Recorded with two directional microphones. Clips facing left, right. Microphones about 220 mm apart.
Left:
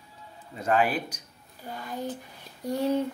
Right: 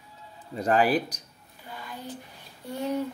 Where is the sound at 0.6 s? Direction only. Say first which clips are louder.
Right 2 dB; 35° right (ahead or behind).